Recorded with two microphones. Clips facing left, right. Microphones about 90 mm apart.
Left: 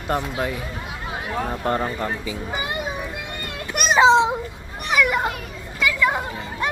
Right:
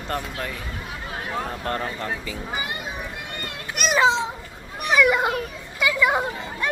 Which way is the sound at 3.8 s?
50° left (ahead or behind).